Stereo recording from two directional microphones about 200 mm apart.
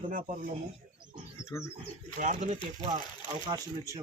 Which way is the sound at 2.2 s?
40° right (ahead or behind).